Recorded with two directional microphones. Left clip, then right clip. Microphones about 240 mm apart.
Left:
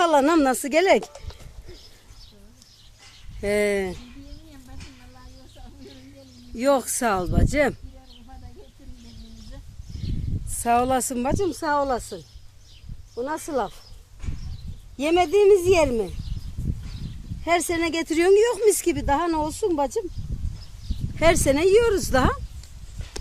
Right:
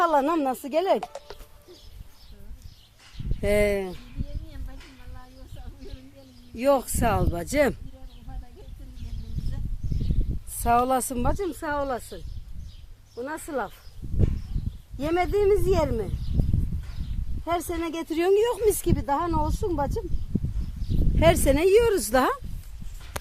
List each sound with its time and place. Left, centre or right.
0.0 s speech: left
3.4 s speech: centre
6.6 s speech: centre
10.6 s speech: centre
14.9 s speech: centre
17.4 s speech: centre
21.2 s speech: centre